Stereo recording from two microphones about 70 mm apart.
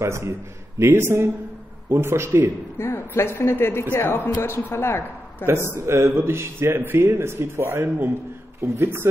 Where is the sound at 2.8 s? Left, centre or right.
Left.